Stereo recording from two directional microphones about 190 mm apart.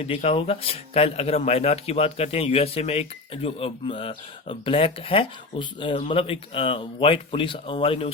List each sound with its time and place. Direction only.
0.0 s speech: 30° left (ahead or behind)